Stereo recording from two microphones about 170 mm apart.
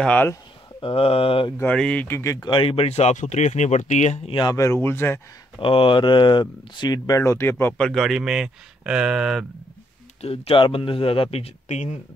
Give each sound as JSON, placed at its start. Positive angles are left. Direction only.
{"t": 0.0, "sound": "speech", "side_deg": 10}
{"t": 0.7, "sound": "speech", "side_deg": 30}
{"t": 1.6, "sound": "speech", "side_deg": 5}
{"t": 4.4, "sound": "speech", "side_deg": 20}
{"t": 5.6, "sound": "speech", "side_deg": 30}
{"t": 10.2, "sound": "speech", "side_deg": 35}